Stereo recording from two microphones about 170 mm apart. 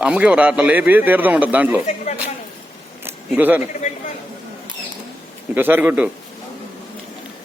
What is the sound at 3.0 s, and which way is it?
Camera, 10° right (ahead or behind).